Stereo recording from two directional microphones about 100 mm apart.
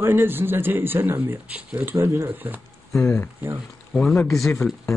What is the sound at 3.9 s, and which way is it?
Speech, 5° left (ahead or behind).